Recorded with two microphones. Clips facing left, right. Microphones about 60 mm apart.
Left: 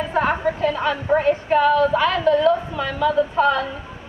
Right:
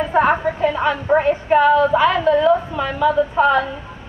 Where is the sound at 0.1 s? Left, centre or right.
Centre.